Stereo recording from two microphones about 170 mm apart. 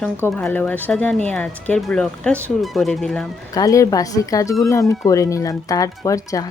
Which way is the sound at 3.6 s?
20° left (ahead or behind).